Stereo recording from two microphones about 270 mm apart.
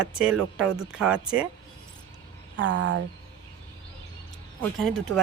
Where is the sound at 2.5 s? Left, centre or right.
Right.